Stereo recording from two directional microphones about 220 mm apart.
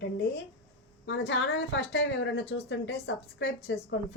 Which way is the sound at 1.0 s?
55° left (ahead or behind).